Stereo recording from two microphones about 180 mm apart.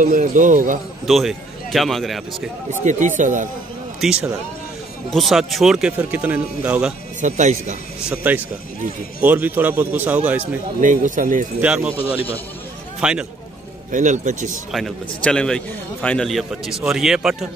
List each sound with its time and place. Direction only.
0.0 s a man's voice: 45° right (ahead or behind)
1.0 s a man's voice: centre (ahead or behind)
2.8 s a man's voice: 45° right (ahead or behind)
4.0 s a man's voice: 5° right (ahead or behind)
7.2 s a man's voice: 45° right (ahead or behind)
8.1 s a man's voice: 10° right (ahead or behind)
10.8 s a man's voice: 45° right (ahead or behind)
11.6 s a man's voice: 5° right (ahead or behind)
13.0 s a man's voice: 5° right (ahead or behind)
13.9 s a man's voice: 45° right (ahead or behind)
14.7 s a man's voice: centre (ahead or behind)